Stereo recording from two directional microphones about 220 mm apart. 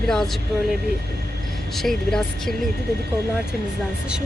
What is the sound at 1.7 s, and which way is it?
Speech, centre (ahead or behind).